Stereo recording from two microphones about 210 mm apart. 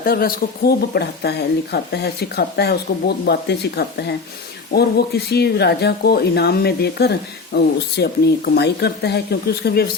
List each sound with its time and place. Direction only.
0.0 s speech: 45° left (ahead or behind)